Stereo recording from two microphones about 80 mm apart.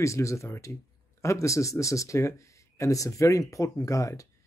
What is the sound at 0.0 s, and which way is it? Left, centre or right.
Speech, left.